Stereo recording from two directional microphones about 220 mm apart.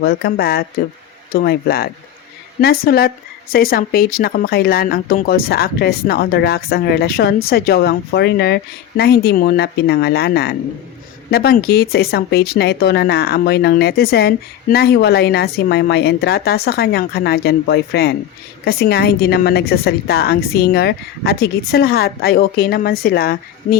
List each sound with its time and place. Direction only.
0.0 s speech: 45° left (ahead or behind)